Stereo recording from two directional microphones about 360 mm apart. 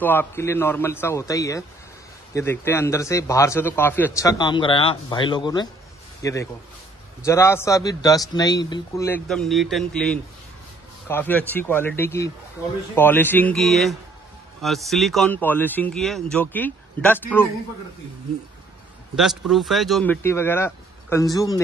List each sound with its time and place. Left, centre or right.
0.0 s a man's voice: centre
19.1 s speech: centre